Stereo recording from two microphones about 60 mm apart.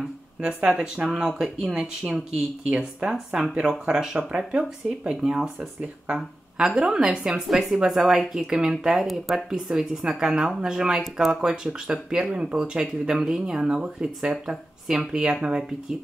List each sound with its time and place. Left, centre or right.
0.4 s speech: centre